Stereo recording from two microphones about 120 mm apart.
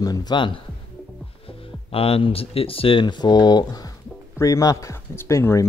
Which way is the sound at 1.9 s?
50° left (ahead or behind).